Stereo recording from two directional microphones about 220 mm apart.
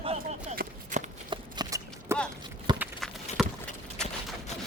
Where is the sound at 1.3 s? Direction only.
15° right (ahead or behind).